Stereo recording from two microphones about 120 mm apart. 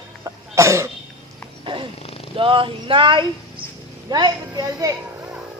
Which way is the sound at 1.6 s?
50° right (ahead or behind).